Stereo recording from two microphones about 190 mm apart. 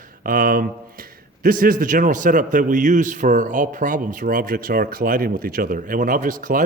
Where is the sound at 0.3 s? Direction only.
50° right (ahead or behind).